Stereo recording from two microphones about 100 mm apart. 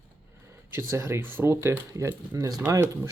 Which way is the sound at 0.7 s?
25° right (ahead or behind).